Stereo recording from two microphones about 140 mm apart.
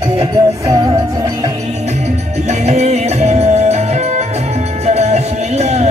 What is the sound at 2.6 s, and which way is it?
Music, 50° right (ahead or behind).